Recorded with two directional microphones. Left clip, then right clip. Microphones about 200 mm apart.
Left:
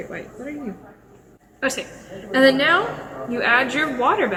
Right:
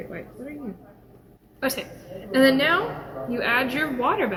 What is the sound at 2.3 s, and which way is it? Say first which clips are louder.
A woman's voice: left 3 dB; 15° right (ahead or behind).